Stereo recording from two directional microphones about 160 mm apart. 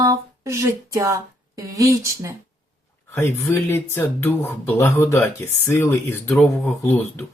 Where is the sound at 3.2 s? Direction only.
15° left (ahead or behind).